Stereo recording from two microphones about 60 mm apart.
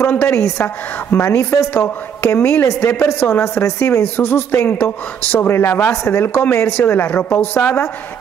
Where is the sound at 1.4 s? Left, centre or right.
Left.